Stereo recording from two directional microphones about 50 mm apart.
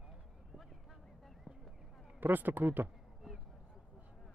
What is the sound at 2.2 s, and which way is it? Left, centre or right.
Speech, right.